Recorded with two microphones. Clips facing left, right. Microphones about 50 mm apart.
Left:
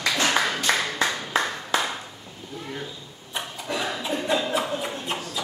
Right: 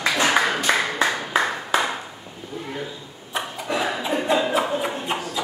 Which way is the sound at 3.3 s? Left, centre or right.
Centre.